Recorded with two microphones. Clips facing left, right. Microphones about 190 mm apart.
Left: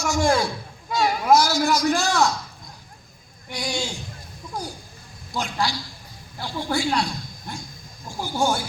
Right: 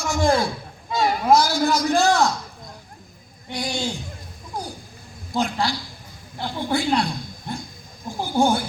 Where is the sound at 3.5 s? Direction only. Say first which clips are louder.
Right 2 dB; 55° right (ahead or behind).